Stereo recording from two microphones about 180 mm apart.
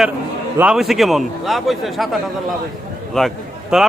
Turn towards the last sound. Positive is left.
turn(degrees=-5)  # may be behind; listen again after turning